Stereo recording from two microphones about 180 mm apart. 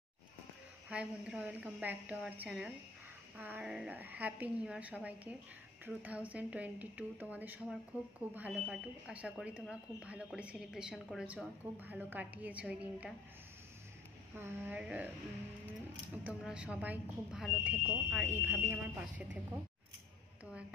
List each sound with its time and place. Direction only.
0.8 s speech: 5° right (ahead or behind)
14.3 s speech: 10° right (ahead or behind)
16.3 s speech: 5° right (ahead or behind)